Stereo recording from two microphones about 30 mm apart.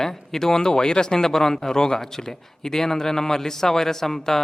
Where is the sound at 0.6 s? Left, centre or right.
Left.